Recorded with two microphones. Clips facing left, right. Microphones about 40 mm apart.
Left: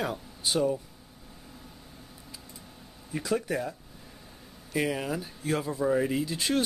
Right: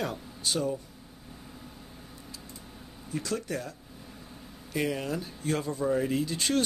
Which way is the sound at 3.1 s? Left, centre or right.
Centre.